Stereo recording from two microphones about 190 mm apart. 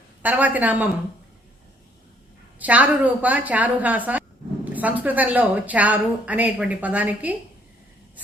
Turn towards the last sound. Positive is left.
turn(degrees=-10)  # may be behind; listen again after turning